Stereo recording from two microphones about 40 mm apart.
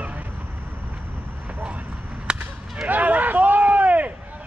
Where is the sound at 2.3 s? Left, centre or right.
Right.